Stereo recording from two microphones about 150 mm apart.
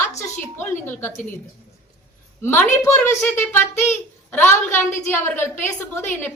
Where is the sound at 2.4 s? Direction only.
15° left (ahead or behind).